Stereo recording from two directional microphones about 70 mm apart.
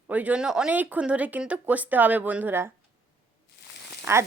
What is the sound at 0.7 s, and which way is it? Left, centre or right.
Speech, right.